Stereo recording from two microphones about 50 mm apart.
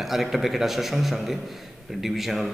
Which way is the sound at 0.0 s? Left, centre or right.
Centre.